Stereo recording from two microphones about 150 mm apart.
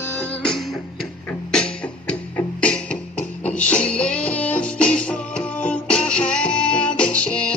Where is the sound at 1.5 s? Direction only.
5° left (ahead or behind).